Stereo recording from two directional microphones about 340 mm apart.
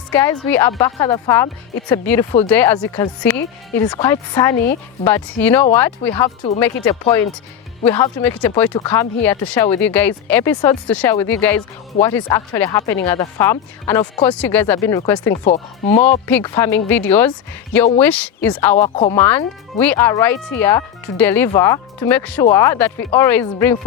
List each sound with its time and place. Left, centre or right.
0.1 s speech: centre
15.4 s speech: centre
16.2 s speech: centre